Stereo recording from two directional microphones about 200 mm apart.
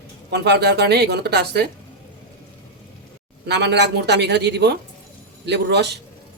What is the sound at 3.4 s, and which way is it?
A man's voice, 60° right (ahead or behind).